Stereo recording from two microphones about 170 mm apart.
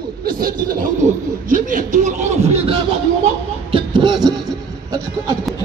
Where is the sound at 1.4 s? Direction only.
50° right (ahead or behind).